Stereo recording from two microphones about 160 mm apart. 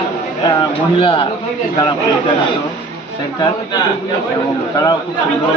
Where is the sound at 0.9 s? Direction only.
30° left (ahead or behind).